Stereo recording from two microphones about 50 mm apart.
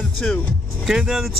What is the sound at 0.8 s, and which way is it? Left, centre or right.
Speech, centre.